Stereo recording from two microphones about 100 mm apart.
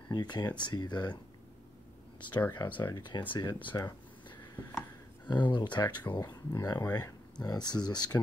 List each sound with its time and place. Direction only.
0.1 s speech: 45° left (ahead or behind)
2.5 s speech: 50° left (ahead or behind)
3.7 s speech: 35° left (ahead or behind)
5.3 s speech: 50° left (ahead or behind)